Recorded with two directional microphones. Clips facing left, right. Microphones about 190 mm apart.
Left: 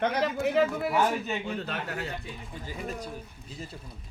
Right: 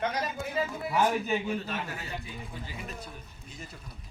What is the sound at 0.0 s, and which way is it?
Speech, 65° left (ahead or behind).